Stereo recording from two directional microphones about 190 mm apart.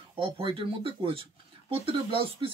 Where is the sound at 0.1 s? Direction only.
30° right (ahead or behind).